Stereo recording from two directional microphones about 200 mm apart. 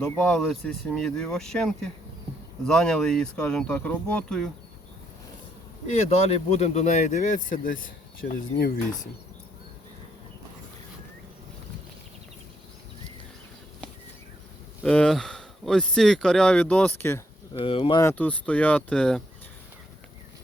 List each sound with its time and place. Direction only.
0.3 s speech: centre (ahead or behind)
5.9 s speech: 35° left (ahead or behind); by 9.0 s 50° left (ahead or behind)
14.8 s speech: 5° left (ahead or behind)
17.5 s speech: 25° left (ahead or behind)
18.0 s speech: 5° left (ahead or behind)